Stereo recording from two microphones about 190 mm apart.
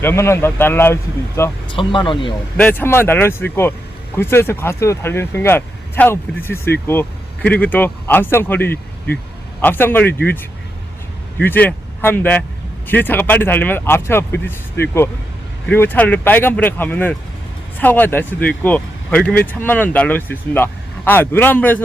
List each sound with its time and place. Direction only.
0.0 s speech: 15° left (ahead or behind)
1.7 s speech: 25° left (ahead or behind)
2.6 s speech: 10° left (ahead or behind)
11.3 s speech: 10° left (ahead or behind)